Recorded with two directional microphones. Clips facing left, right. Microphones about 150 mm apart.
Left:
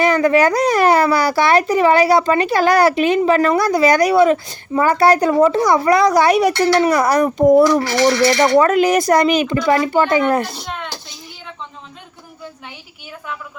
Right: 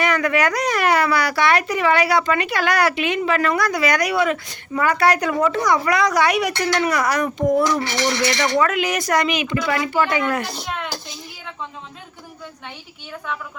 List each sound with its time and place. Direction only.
0.0 s speech: 30° left (ahead or behind)